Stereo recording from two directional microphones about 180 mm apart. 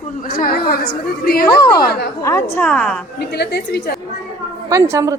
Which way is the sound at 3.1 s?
65° left (ahead or behind).